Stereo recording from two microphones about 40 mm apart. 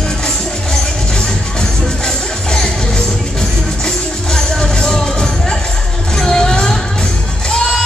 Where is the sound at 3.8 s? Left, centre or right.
Centre.